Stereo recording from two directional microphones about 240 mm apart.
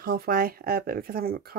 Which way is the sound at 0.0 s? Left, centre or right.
Right.